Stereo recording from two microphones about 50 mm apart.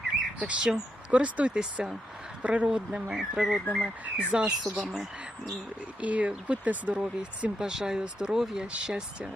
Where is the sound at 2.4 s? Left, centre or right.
Right.